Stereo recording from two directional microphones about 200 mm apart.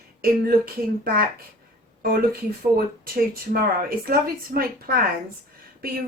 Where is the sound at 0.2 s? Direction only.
50° right (ahead or behind).